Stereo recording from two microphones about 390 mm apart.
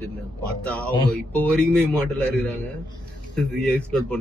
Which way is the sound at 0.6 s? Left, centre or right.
Centre.